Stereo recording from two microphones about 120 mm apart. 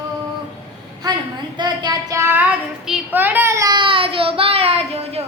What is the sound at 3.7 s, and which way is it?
Child singing, 45° right (ahead or behind).